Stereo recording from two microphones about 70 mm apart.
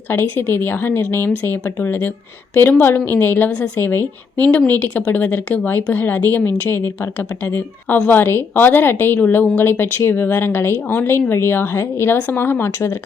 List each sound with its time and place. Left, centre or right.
0.1 s a woman's voice: left